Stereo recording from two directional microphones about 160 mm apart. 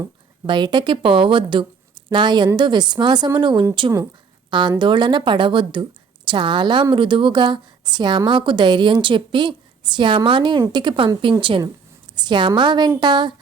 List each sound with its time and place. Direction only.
0.4 s a woman's voice: 30° right (ahead or behind)
4.8 s a woman's voice: 30° right (ahead or behind)